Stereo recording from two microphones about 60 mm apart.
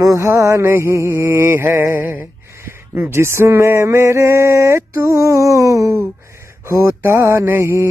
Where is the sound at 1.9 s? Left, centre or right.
Right.